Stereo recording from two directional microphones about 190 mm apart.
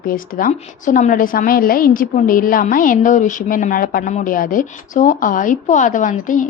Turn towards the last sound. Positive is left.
turn(degrees=45)  # may be behind; listen again after turning